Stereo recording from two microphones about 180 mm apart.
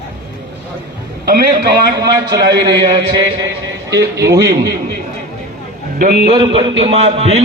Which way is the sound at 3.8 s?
20° right (ahead or behind).